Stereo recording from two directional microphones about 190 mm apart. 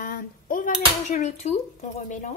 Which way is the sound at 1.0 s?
35° left (ahead or behind).